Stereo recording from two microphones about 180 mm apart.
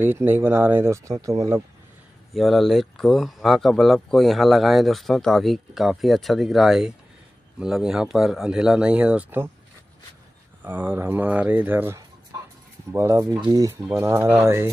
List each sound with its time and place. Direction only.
0.0 s speech: 10° right (ahead or behind)
2.3 s speech: centre (ahead or behind)
10.6 s speech: 10° right (ahead or behind)